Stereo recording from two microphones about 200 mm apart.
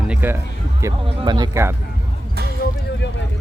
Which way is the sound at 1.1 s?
20° right (ahead or behind).